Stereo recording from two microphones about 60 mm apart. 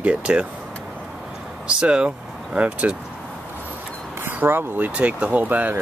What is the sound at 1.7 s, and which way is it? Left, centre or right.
Speech, centre.